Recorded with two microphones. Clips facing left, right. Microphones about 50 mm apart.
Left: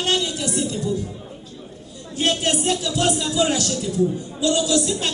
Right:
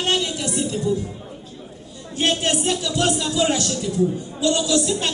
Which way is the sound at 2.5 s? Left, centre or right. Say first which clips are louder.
Even; centre.